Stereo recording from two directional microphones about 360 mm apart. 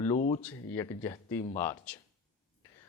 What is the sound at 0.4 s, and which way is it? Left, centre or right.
Speech, centre.